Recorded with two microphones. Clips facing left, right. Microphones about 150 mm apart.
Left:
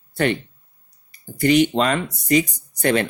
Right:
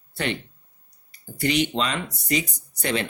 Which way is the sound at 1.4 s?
50° left (ahead or behind).